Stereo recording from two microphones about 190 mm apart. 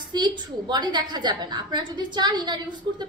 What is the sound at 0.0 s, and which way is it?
A woman's voice, 25° right (ahead or behind).